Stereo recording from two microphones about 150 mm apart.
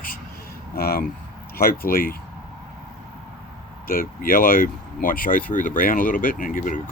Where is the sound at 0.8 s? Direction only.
90° left.